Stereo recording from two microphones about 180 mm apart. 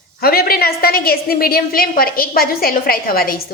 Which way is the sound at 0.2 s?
55° left (ahead or behind).